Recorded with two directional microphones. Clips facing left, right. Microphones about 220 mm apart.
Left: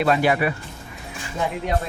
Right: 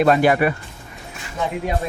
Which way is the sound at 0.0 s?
45° right (ahead or behind).